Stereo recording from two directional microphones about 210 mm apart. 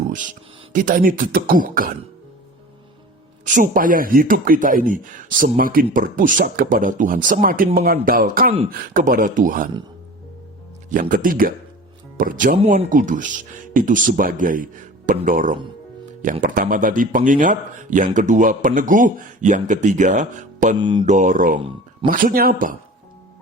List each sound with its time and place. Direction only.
0.7 s speech: 40° right (ahead or behind)
3.4 s speech: 40° right (ahead or behind)
11.1 s speech: 40° right (ahead or behind)
20.7 s mantra: 20° right (ahead or behind)
21.0 s speech: 35° right (ahead or behind)